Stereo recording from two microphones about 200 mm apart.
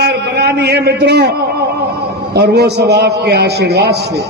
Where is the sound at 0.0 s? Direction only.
55° right (ahead or behind).